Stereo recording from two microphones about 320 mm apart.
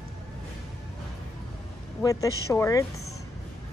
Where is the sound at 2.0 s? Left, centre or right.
Centre.